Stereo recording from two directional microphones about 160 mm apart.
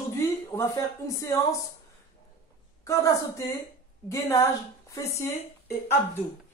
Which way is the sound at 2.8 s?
20° left (ahead or behind).